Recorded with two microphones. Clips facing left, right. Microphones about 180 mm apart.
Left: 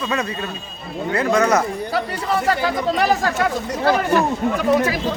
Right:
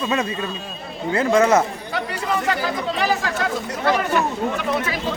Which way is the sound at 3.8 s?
40° left (ahead or behind).